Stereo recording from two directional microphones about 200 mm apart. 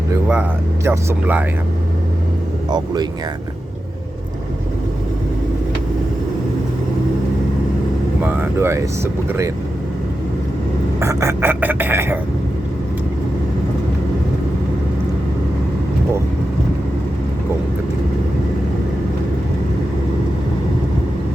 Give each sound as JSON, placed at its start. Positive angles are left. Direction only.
{"t": 0.1, "sound": "speech", "side_deg": -10}
{"t": 2.7, "sound": "speech", "side_deg": -20}
{"t": 8.2, "sound": "speech", "side_deg": -10}
{"t": 11.0, "sound": "speech", "side_deg": -15}